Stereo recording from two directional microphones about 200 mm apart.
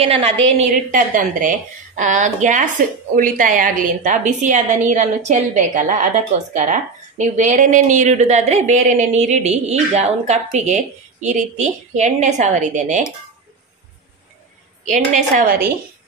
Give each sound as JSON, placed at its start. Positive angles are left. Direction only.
{"t": 0.0, "sound": "a woman's voice", "side_deg": -30}
{"t": 0.9, "sound": "a woman's voice", "side_deg": -40}
{"t": 14.9, "sound": "a woman's voice", "side_deg": -40}